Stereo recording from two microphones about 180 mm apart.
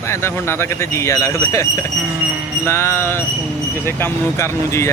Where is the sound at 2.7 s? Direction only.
15° left (ahead or behind).